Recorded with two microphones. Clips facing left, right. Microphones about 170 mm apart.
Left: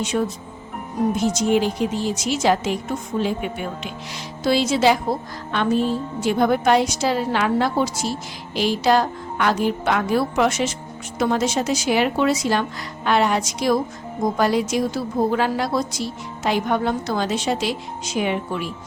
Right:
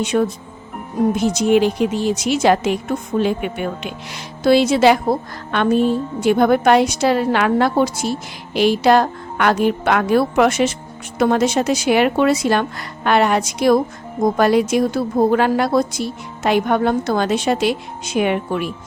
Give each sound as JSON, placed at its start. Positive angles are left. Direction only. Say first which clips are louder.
{"t": 0.0, "sound": "a woman's voice", "louder": "right 5 dB", "side_deg": -60}